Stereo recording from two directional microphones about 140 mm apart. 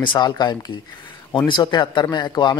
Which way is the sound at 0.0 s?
35° left (ahead or behind).